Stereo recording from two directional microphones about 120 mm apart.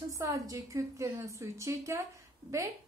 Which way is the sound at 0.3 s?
25° right (ahead or behind).